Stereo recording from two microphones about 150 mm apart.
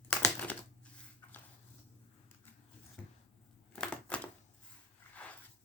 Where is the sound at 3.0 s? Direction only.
5° left (ahead or behind).